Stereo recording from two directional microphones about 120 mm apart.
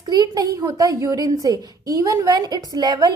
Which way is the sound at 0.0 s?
35° right (ahead or behind).